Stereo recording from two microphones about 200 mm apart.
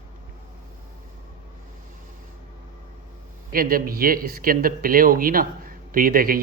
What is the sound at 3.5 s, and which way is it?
A man's voice, 45° right (ahead or behind).